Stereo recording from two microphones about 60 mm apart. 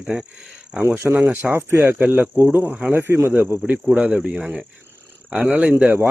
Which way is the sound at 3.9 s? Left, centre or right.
Right.